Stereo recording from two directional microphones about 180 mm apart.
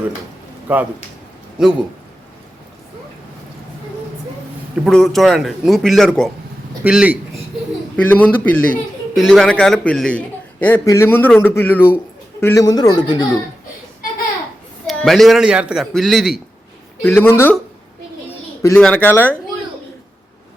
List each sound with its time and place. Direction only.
0.7 s a man's voice: 10° right (ahead or behind)
4.9 s a man's voice: centre (ahead or behind)
7.9 s a man's voice: 10° left (ahead or behind)
14.8 s a man's voice: centre (ahead or behind)
17.0 s a man's voice: 10° left (ahead or behind)
18.8 s a man's voice: 5° left (ahead or behind)